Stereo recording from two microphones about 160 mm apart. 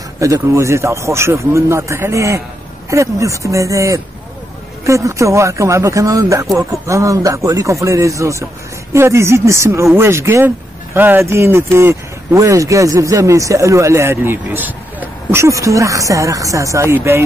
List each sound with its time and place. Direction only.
0.2 s a man's voice: 20° right (ahead or behind)